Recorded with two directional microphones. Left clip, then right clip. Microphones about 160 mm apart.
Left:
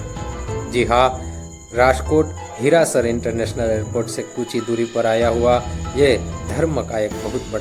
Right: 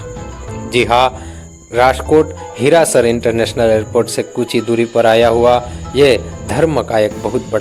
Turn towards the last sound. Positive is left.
turn(degrees=-35)  # may be behind; listen again after turning